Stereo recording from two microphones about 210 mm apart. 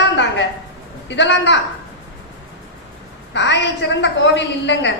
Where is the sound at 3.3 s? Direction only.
60° left (ahead or behind).